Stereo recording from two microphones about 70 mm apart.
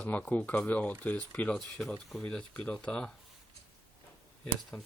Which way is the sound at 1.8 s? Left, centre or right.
Centre.